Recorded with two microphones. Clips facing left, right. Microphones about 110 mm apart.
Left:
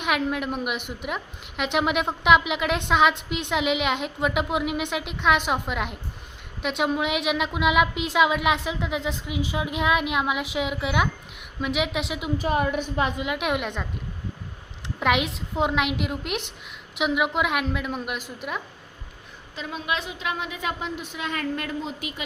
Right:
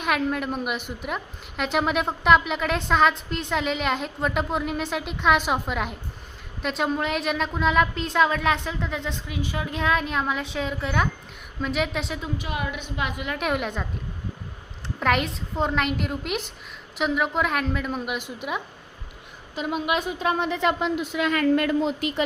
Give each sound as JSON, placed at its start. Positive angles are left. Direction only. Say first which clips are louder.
{"t": 0.0, "sound": "a woman's voice", "louder": "right 1 dB", "side_deg": 5}
{"t": 12.4, "sound": "a woman's voice", "louder": "left 7 dB", "side_deg": 40}
{"t": 13.4, "sound": "a woman's voice", "louder": "right 3 dB", "side_deg": 5}
{"t": 15.0, "sound": "a woman's voice", "louder": "even", "side_deg": 5}
{"t": 19.6, "sound": "a woman's voice", "louder": "right 4 dB", "side_deg": -20}
{"t": 20.4, "sound": "speech", "louder": "right 7 dB", "side_deg": -60}